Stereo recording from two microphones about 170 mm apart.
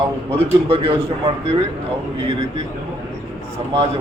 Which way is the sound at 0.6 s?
35° right (ahead or behind).